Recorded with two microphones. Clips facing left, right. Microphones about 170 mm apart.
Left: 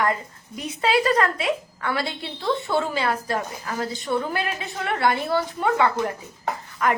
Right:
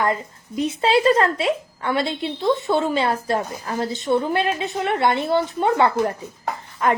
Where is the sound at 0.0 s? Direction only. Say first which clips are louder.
Right 2 dB; 25° right (ahead or behind).